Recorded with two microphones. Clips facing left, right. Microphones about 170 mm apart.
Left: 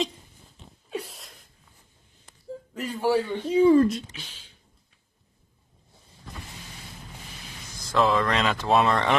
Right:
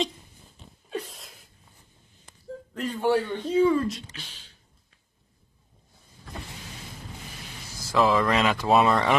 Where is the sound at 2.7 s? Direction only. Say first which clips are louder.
Even; 5° left (ahead or behind).